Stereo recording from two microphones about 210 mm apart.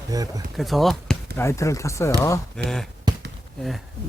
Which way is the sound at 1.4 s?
15° left (ahead or behind).